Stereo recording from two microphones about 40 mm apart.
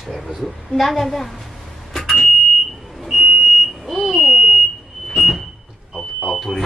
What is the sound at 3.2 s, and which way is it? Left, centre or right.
Smoke detector, right.